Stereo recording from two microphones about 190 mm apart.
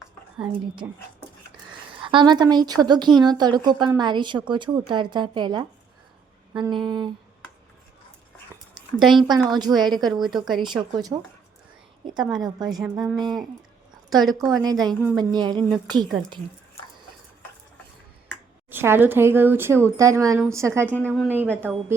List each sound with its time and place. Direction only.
2.0 s a woman's voice: 25° right (ahead or behind)
6.7 s a woman's voice: 25° right (ahead or behind)
9.0 s speech: centre (ahead or behind)
9.2 s a woman's voice: 20° right (ahead or behind)
12.8 s speech: centre (ahead or behind)
14.5 s a woman's voice: 20° right (ahead or behind)
18.7 s speech: 10° right (ahead or behind)
20.8 s a woman's voice: 10° left (ahead or behind)
21.1 s speech: 10° right (ahead or behind)